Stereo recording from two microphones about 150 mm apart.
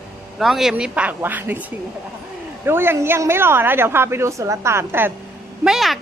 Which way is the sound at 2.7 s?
15° right (ahead or behind).